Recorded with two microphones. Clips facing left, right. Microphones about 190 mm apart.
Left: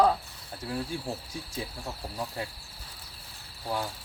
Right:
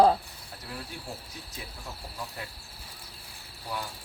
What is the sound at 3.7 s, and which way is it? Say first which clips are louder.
Mechanisms: left 4 dB; 30° left (ahead or behind).